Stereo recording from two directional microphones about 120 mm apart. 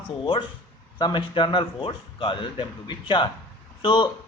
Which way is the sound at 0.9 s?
40° left (ahead or behind).